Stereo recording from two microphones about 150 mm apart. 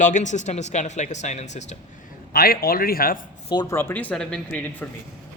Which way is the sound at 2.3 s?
90° left.